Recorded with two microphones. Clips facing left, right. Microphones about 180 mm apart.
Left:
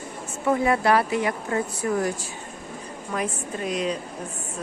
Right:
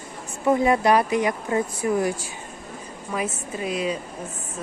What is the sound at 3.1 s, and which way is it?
Speech, 5° right (ahead or behind).